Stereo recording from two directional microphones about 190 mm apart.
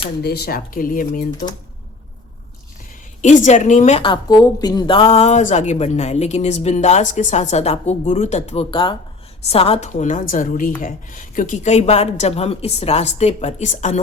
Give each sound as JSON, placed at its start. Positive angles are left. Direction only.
{"t": 0.2, "sound": "speech", "side_deg": 55}
{"t": 3.2, "sound": "a woman's voice", "side_deg": 40}